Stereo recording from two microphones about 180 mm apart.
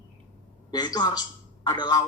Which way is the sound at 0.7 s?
20° left (ahead or behind).